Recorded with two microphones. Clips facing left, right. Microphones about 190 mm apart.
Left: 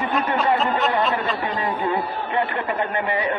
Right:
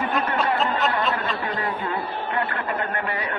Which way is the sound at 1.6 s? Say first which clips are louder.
Left 4 dB; 20° left (ahead or behind).